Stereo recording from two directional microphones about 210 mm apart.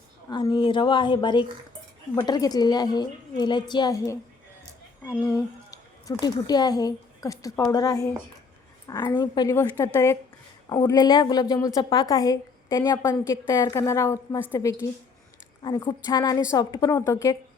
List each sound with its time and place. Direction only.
0.3 s a woman's voice: 20° left (ahead or behind)